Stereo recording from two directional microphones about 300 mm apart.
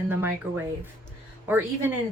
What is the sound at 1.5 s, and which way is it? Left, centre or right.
Speech, centre.